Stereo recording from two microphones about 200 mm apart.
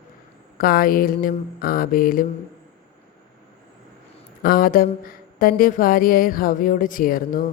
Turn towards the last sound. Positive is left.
turn(degrees=45)  # may be behind; listen again after turning